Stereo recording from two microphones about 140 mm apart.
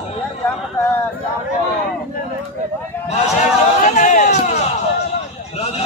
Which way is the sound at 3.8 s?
70° left (ahead or behind).